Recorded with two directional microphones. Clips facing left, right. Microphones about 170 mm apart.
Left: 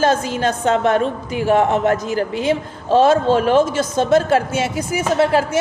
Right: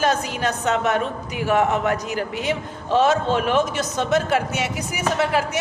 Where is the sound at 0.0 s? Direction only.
30° left (ahead or behind).